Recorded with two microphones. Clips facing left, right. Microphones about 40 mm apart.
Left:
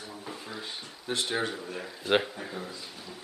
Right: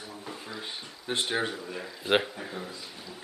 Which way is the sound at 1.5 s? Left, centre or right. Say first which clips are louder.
Even; centre.